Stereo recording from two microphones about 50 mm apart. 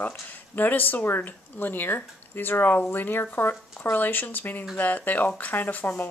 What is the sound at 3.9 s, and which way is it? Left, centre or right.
Speech, left.